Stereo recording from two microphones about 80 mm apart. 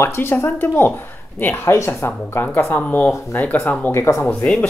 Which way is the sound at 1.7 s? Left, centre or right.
Left.